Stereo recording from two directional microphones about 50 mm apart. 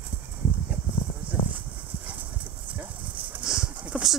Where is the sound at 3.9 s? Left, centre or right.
Right.